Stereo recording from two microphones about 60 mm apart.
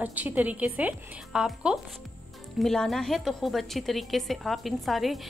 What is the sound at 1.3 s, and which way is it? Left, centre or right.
Speech, centre.